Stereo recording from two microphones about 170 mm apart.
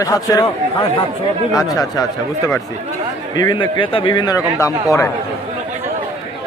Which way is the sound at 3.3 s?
25° left (ahead or behind).